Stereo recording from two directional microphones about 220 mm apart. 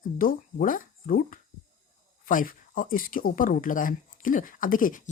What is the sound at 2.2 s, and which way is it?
Speech, 40° left (ahead or behind).